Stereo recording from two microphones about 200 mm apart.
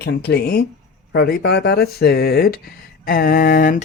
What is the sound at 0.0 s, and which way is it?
Speech, 55° left (ahead or behind).